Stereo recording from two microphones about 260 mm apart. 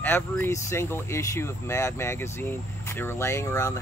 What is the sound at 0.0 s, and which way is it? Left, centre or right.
Speech, centre.